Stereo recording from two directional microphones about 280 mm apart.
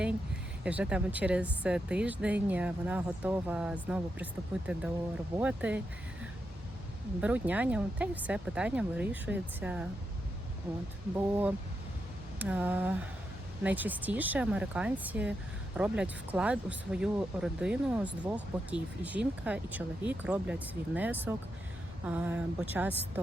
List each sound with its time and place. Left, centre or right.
0.6 s speech: centre
7.2 s speech: centre
11.2 s a woman's voice: centre